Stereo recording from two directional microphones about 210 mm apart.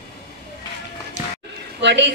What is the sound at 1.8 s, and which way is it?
Speech, 60° right (ahead or behind).